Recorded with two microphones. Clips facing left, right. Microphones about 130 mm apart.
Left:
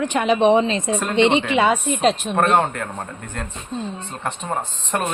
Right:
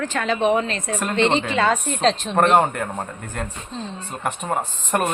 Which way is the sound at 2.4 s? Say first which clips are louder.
Right 2 dB; 10° right (ahead or behind).